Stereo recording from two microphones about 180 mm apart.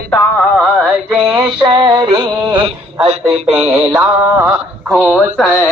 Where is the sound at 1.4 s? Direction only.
25° right (ahead or behind).